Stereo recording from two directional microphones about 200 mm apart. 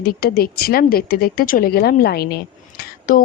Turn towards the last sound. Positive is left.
turn(degrees=45)  # may be behind; listen again after turning